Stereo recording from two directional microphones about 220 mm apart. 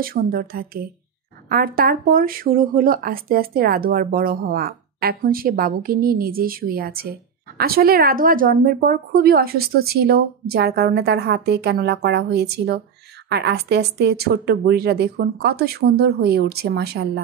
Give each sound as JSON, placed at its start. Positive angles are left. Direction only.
{"t": 0.0, "sound": "a woman's voice", "side_deg": -40}